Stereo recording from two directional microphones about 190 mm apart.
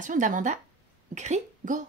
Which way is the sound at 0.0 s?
40° right (ahead or behind).